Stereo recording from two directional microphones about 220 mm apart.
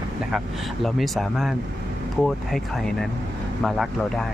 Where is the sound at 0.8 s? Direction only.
Centre (ahead or behind).